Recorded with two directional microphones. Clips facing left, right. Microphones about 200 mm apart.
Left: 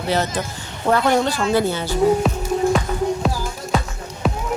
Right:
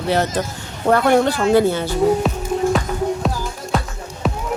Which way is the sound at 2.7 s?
Centre (ahead or behind).